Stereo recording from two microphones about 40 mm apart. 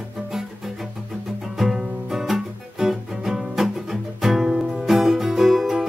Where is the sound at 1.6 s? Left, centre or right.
Centre.